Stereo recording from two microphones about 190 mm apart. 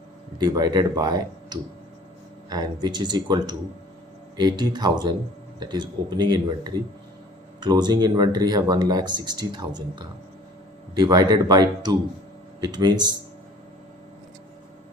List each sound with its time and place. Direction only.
0.3 s speech: 20° right (ahead or behind)